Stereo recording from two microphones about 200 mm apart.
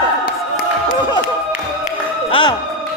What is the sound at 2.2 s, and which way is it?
Music, 25° left (ahead or behind).